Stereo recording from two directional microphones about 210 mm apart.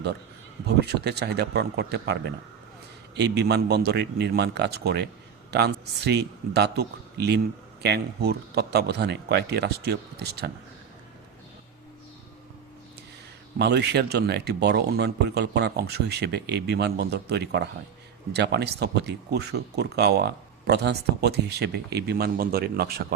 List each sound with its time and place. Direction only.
0.8 s speech: 50° right (ahead or behind)
13.6 s speech: 50° right (ahead or behind)